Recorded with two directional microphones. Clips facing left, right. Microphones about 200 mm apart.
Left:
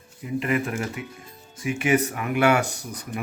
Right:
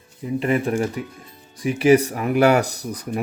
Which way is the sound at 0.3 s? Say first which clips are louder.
Right 5 dB; 30° right (ahead or behind).